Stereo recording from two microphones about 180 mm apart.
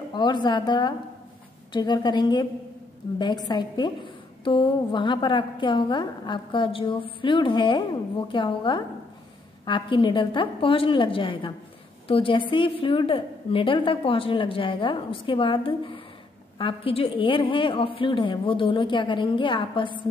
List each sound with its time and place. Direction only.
0.1 s a woman's voice: 25° left (ahead or behind)